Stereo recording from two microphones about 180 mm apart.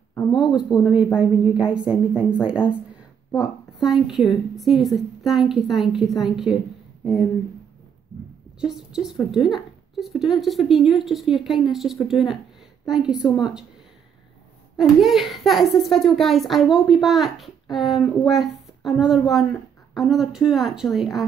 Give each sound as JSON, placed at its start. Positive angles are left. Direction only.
{"t": 0.5, "sound": "speech", "side_deg": 25}
{"t": 1.0, "sound": "a child's voice", "side_deg": -5}
{"t": 8.5, "sound": "a child's voice", "side_deg": -5}
{"t": 14.8, "sound": "a child's voice", "side_deg": 0}